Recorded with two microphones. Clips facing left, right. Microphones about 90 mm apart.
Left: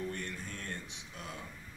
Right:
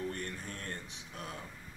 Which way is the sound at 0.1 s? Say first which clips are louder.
Even; 40° right (ahead or behind).